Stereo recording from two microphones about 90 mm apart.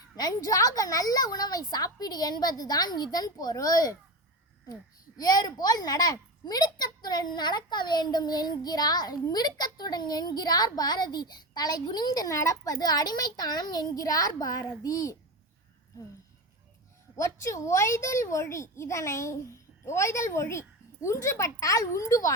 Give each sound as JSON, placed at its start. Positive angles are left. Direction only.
{"t": 0.2, "sound": "a child's voice", "side_deg": 45}
{"t": 17.2, "sound": "a child's voice", "side_deg": 35}